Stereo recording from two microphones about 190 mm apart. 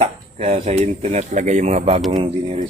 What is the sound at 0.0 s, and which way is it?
Speech, 35° right (ahead or behind).